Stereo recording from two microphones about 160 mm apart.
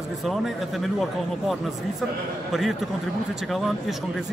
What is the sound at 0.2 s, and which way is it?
Speech, centre (ahead or behind).